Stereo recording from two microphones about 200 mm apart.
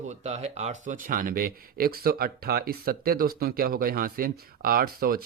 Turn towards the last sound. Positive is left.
turn(degrees=-50)  # may be behind; listen again after turning